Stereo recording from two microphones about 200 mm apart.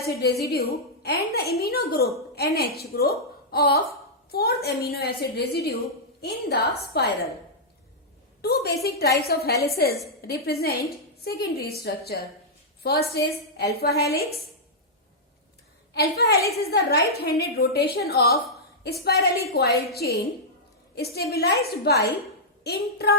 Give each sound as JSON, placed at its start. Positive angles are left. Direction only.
{"t": 0.0, "sound": "a woman's voice", "side_deg": 50}
{"t": 8.4, "sound": "a woman's voice", "side_deg": 50}
{"t": 16.0, "sound": "a woman's voice", "side_deg": 50}